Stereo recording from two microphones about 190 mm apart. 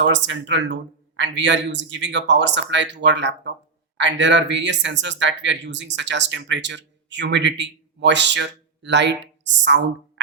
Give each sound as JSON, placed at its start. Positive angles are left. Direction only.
{"t": 0.0, "sound": "speech", "side_deg": -75}